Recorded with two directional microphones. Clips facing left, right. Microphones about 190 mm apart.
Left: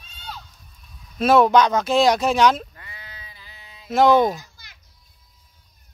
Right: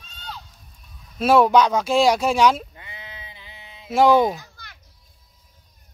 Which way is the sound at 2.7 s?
20° right (ahead or behind).